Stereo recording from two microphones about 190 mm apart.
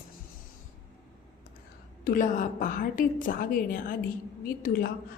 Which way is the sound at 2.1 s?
45° left (ahead or behind).